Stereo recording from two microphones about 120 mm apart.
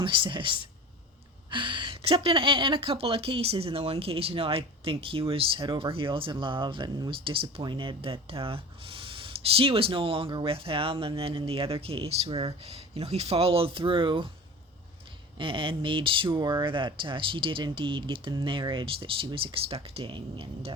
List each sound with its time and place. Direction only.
0.0 s speech: 45° right (ahead or behind)
12.3 s speech: 35° right (ahead or behind)
12.6 s speech: 60° right (ahead or behind)
15.4 s speech: 45° right (ahead or behind)